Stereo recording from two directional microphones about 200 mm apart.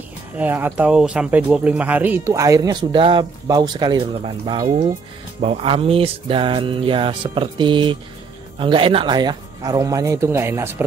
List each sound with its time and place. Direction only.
0.4 s speech: 10° right (ahead or behind)
5.4 s music: 30° right (ahead or behind)
8.5 s speech: 25° right (ahead or behind)